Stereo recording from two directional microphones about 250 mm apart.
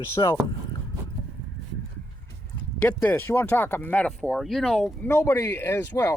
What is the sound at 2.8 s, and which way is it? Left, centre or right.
Speech, centre.